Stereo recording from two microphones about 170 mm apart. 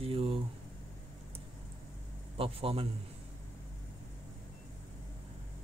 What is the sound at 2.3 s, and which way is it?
Speech, 35° right (ahead or behind).